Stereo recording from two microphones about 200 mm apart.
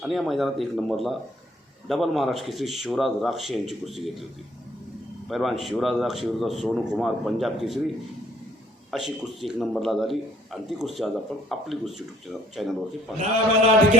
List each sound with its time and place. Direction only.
0.0 s a man's voice: centre (ahead or behind)
5.3 s a man's voice: centre (ahead or behind)
8.9 s a man's voice: centre (ahead or behind)